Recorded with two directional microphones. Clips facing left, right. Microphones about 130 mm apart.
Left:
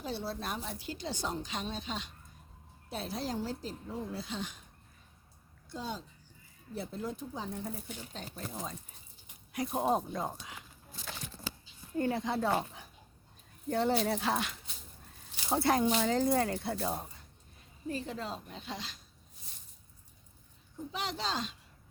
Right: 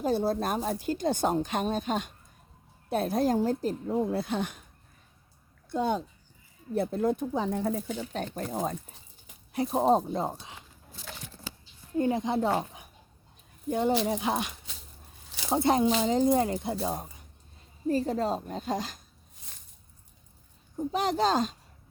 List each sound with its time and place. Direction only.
0.0 s speech: 45° right (ahead or behind)
5.6 s speech: 60° right (ahead or behind)
9.5 s speech: 30° right (ahead or behind)
11.9 s speech: 20° right (ahead or behind)
17.8 s speech: 40° right (ahead or behind)
20.7 s speech: 45° right (ahead or behind)